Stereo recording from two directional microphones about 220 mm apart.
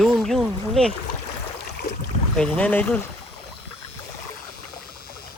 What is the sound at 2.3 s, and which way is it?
Speech, 5° left (ahead or behind).